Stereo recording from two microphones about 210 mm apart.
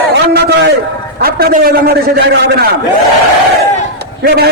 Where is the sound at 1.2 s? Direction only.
45° right (ahead or behind).